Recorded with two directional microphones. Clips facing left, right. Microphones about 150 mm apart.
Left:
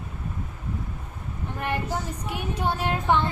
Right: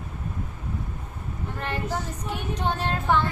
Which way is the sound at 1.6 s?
15° left (ahead or behind).